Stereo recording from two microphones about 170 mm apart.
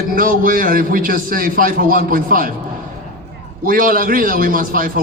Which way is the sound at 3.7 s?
55° right (ahead or behind).